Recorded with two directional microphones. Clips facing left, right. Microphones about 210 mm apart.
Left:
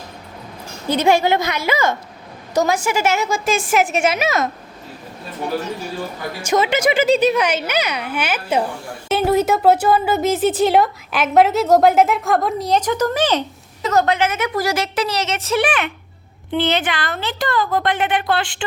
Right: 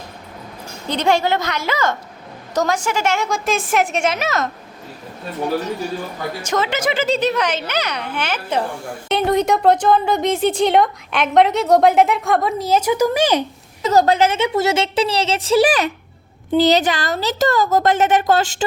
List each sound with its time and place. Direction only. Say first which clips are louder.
0.9 s a child's voice: left 2 dB; 10° left (ahead or behind)
6.4 s a child's voice: left 4 dB; 10° left (ahead or behind); by 13.4 s 10° right (ahead or behind)
13.9 s a woman's voice: right 3 dB; 35° right (ahead or behind)